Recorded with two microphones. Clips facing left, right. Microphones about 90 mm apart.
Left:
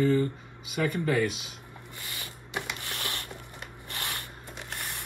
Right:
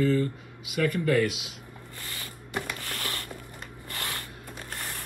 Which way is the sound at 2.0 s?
20° left (ahead or behind).